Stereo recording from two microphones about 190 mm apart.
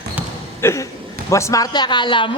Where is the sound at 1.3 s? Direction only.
15° left (ahead or behind).